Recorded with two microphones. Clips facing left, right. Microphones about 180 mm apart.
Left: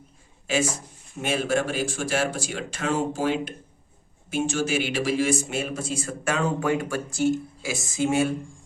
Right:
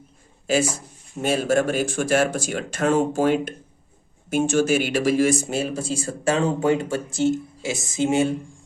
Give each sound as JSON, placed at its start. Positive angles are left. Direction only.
{"t": 0.4, "sound": "speech", "side_deg": -40}